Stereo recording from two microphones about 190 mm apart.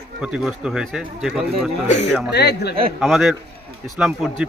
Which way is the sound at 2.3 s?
60° left (ahead or behind).